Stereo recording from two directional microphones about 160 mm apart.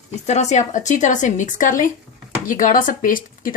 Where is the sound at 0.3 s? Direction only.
45° left (ahead or behind).